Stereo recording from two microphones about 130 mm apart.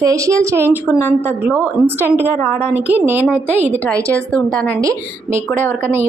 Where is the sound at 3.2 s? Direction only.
10° left (ahead or behind).